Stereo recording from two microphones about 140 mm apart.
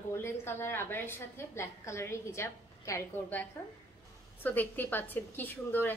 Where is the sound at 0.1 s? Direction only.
15° left (ahead or behind).